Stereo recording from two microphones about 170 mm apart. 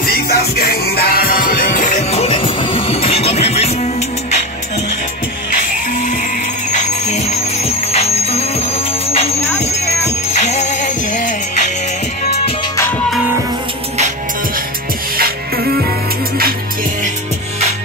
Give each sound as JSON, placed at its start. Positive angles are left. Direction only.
{"t": 0.0, "sound": "music", "side_deg": 65}
{"t": 6.7, "sound": "music", "side_deg": 40}
{"t": 10.3, "sound": "music", "side_deg": 40}
{"t": 15.1, "sound": "music", "side_deg": -60}